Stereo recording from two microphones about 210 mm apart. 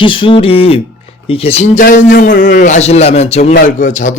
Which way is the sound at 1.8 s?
45° left (ahead or behind).